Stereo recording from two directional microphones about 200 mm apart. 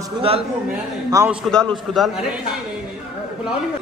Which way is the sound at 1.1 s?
15° right (ahead or behind).